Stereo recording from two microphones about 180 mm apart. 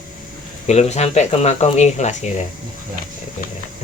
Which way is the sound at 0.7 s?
40° left (ahead or behind).